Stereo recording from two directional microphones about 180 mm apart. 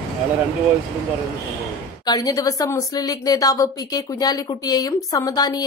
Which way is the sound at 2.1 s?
20° left (ahead or behind).